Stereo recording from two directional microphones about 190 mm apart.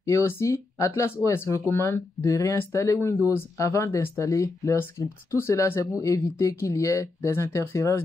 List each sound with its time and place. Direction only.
0.0 s speech: 15° left (ahead or behind)